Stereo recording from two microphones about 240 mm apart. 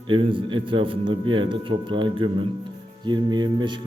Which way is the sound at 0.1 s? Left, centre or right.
Right.